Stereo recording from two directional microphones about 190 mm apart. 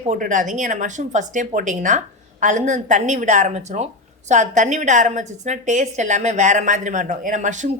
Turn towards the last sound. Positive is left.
turn(degrees=-40)  # may be behind; listen again after turning